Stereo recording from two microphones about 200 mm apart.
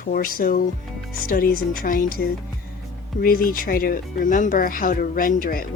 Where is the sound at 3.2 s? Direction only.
45° left (ahead or behind).